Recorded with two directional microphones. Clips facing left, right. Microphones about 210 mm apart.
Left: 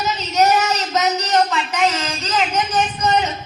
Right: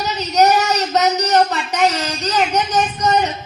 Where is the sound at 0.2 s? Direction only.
35° right (ahead or behind).